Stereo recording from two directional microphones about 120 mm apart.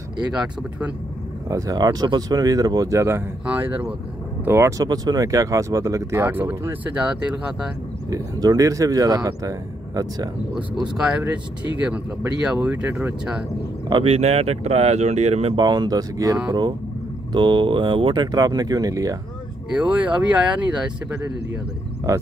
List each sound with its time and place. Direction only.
0.3 s speech: 10° right (ahead or behind)
1.5 s speech: 30° right (ahead or behind)
4.5 s speech: 25° right (ahead or behind)
8.1 s speech: 30° right (ahead or behind)
12.3 s speech: 5° right (ahead or behind)
14.0 s speech: 60° right (ahead or behind)
15.5 s speech: 35° right (ahead or behind)
19.8 s speech: 10° right (ahead or behind)
22.1 s speech: 25° right (ahead or behind)